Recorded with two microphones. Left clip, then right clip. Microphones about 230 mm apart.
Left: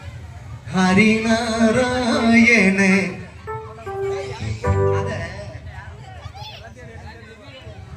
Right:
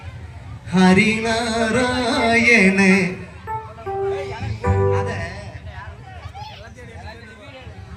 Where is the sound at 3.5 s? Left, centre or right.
Right.